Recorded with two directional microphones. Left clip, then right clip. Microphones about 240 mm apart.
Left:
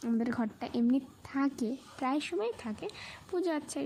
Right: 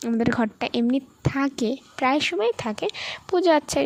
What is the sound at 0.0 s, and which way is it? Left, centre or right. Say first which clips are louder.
A woman's voice: right 10 dB; right.